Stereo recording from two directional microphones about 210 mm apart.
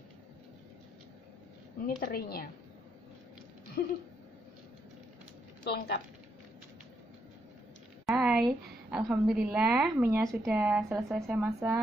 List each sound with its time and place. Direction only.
1.9 s a woman's voice: 45° left (ahead or behind)
3.8 s a woman's voice: 45° left (ahead or behind)
5.6 s a woman's voice: 50° left (ahead or behind)
8.1 s a sound: centre (ahead or behind)
8.9 s a woman's voice: 5° right (ahead or behind)